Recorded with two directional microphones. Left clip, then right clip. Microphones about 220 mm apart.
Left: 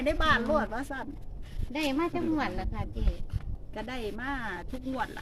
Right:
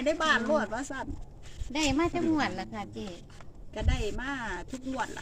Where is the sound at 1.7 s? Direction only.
40° right (ahead or behind).